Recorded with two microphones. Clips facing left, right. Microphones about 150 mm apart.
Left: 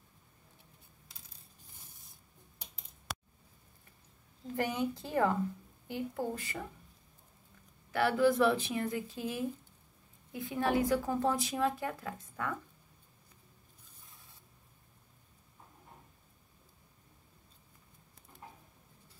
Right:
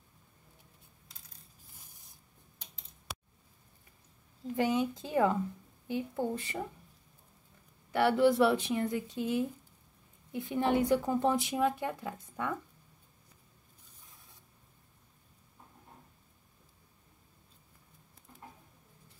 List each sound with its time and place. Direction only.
4.6 s a woman's voice: 15° right (ahead or behind)
8.0 s speech: 20° right (ahead or behind)